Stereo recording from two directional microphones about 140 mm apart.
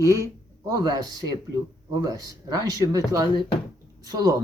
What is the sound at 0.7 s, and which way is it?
Speech, 25° right (ahead or behind).